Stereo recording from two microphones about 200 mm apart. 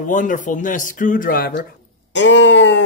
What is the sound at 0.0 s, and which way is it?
Speech, 40° left (ahead or behind).